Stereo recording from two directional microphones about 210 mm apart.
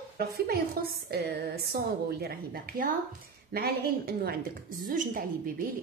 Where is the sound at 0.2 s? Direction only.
50° right (ahead or behind).